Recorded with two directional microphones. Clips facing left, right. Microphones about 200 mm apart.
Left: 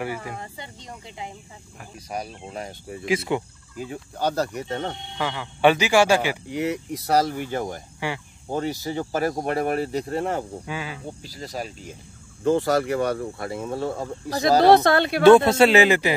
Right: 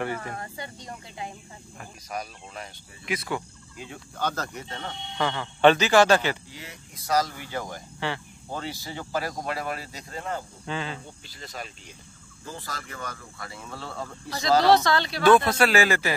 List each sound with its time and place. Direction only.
0.0 s speech: 10° left (ahead or behind)
2.1 s speech: 30° left (ahead or behind)
3.7 s speech: 40° left (ahead or behind)
5.1 s speech: 10° left (ahead or behind)
6.5 s speech: 70° left (ahead or behind); by 7.6 s 55° left (ahead or behind)
8.0 s speech: 10° left (ahead or behind)
8.5 s speech: 45° left (ahead or behind); by 10.4 s 65° left (ahead or behind)
10.7 s speech: 10° left (ahead or behind)
11.2 s speech: 35° left (ahead or behind)
12.4 s speech: 75° left (ahead or behind)
13.4 s speech: 55° left (ahead or behind)
13.7 s speech: 45° left (ahead or behind)
14.6 s speech: 55° left (ahead or behind)
15.2 s speech: 25° left (ahead or behind)